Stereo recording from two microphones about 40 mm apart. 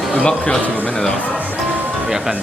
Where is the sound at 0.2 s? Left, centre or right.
Left.